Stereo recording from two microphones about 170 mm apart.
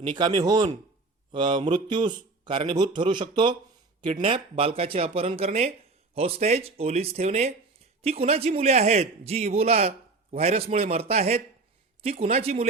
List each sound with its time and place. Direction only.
0.1 s a man's voice: 25° right (ahead or behind)